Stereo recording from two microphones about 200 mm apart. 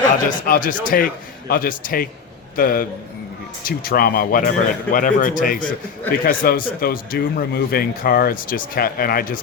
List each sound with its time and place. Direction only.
0.3 s speech: 45° left (ahead or behind)